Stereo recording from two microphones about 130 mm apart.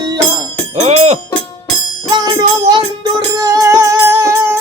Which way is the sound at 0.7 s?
55° right (ahead or behind).